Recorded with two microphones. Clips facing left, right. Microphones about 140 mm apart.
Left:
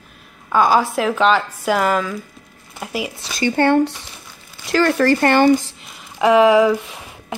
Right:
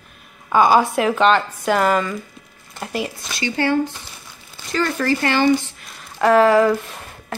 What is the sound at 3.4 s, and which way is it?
Speech, 55° left (ahead or behind).